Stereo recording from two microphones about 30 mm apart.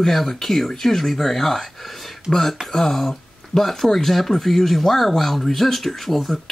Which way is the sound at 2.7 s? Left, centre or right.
Centre.